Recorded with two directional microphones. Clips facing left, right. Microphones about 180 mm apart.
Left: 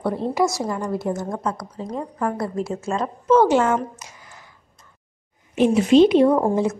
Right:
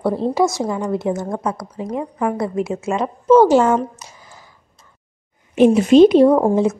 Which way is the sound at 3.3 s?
35° right (ahead or behind).